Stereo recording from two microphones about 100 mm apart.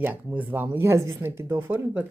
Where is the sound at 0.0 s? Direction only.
20° right (ahead or behind).